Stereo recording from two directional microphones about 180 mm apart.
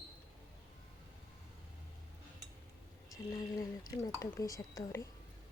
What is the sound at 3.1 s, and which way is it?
Speech, 20° left (ahead or behind).